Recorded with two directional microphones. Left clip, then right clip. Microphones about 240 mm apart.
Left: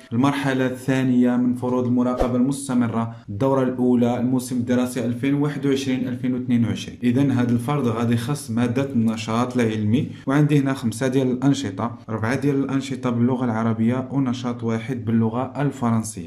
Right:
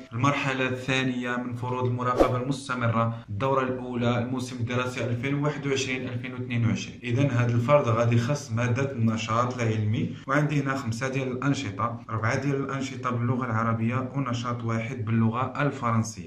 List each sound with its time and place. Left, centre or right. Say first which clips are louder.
0.2 s a man's voice: left 4 dB; left